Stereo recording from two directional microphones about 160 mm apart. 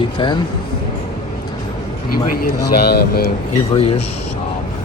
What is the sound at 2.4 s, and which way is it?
Speech, 80° left.